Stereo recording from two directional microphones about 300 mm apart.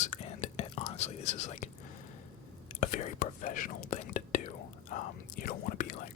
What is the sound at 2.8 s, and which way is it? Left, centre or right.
Whispering, left.